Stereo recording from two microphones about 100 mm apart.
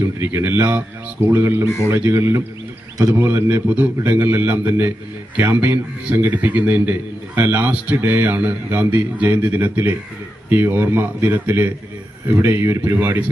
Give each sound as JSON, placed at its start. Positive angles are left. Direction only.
{"t": 0.2, "sound": "a man's voice", "side_deg": -25}
{"t": 1.6, "sound": "a man's voice", "side_deg": 30}
{"t": 2.0, "sound": "a man's voice", "side_deg": -25}